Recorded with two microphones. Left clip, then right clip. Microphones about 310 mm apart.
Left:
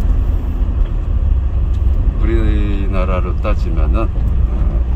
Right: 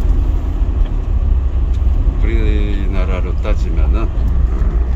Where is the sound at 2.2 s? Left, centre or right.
Centre.